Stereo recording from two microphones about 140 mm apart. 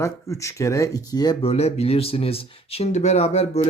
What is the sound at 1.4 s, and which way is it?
Speech, 50° left (ahead or behind).